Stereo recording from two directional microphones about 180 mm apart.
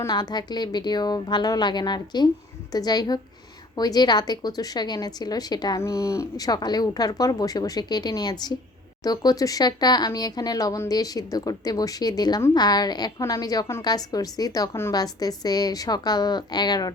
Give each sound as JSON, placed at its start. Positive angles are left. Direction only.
{"t": 0.0, "sound": "speech", "side_deg": 20}